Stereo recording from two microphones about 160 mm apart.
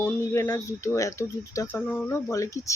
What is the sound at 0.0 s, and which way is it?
Speech, 20° left (ahead or behind).